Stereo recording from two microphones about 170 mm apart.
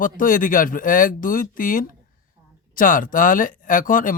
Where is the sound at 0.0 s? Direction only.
55° left (ahead or behind).